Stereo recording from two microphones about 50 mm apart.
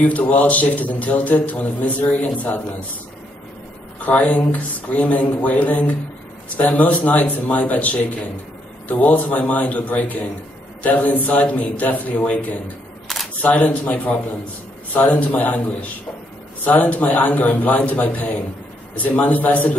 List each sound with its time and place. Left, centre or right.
0.0 s a man's voice: left
4.0 s a man's voice: left